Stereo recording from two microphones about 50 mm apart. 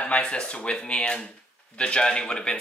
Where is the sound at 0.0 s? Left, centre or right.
Left.